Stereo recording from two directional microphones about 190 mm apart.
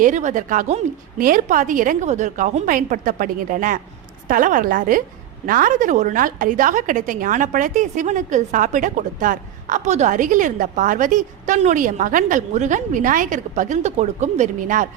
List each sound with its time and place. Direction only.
0.0 s a woman's voice: 40° right (ahead or behind)